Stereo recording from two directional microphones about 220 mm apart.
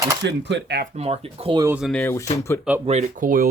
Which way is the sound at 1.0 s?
25° right (ahead or behind).